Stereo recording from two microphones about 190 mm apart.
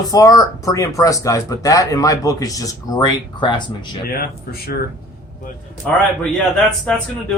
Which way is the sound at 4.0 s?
55° left (ahead or behind).